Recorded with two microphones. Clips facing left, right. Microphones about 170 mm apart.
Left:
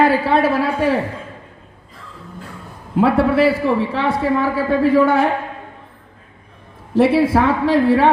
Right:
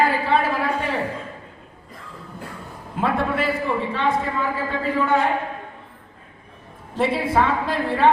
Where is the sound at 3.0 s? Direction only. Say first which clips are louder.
Left 9 dB; 80° left.